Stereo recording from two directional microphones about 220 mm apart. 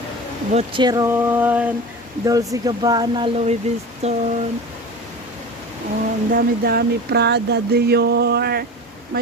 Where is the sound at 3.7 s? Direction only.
30° right (ahead or behind).